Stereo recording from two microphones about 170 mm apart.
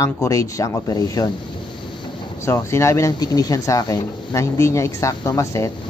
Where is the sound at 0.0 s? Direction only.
20° left (ahead or behind).